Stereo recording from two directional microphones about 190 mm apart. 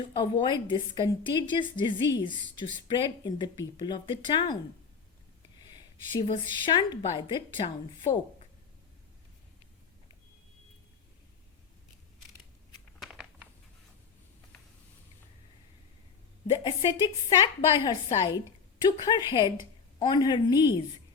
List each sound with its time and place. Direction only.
0.0 s a woman's voice: 25° left (ahead or behind)
6.1 s a woman's voice: 25° left (ahead or behind)
13.0 s a sound: 5° right (ahead or behind)
16.6 s a woman's voice: 25° left (ahead or behind)